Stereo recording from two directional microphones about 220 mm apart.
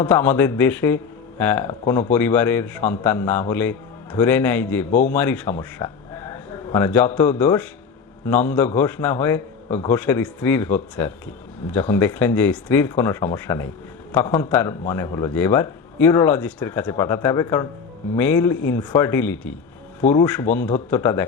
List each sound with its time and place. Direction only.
0.0 s a man's voice: 10° left (ahead or behind)